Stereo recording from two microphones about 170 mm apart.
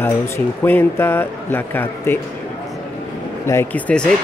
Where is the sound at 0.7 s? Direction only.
15° left (ahead or behind).